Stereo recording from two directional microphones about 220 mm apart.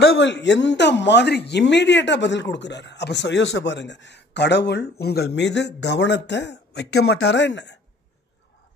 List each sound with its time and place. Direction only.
0.0 s a man's voice: 50° left (ahead or behind)